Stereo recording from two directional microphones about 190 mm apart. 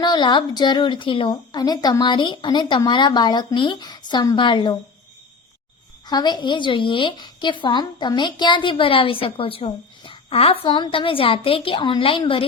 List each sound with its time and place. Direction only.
0.0 s a woman's voice: 20° left (ahead or behind)
6.1 s a woman's voice: 20° left (ahead or behind)